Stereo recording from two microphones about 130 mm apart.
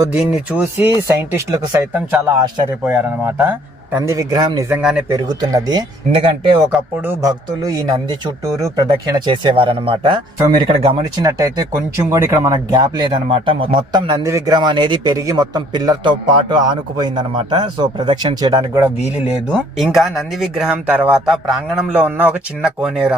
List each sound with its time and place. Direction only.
0.1 s speech: 10° right (ahead or behind)
1.9 s speech: 15° right (ahead or behind); by 4.6 s 30° right (ahead or behind)
4.8 s speech: 5° right (ahead or behind)
5.3 s a man's voice: 30° right (ahead or behind)
6.1 s speech: 45° right (ahead or behind)
6.7 s speech: 10° right (ahead or behind)
7.2 s a man's voice: 25° right (ahead or behind)
11.2 s speech: 25° right (ahead or behind); by 13.7 s 45° right (ahead or behind)
13.9 s a man's voice: 25° right (ahead or behind)
19.8 s speech: centre (ahead or behind)